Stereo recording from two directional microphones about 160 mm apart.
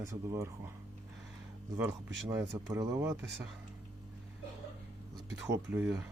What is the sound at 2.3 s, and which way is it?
Speech, 15° right (ahead or behind).